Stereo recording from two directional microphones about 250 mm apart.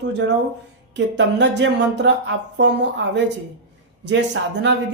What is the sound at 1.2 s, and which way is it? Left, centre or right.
Speech, right.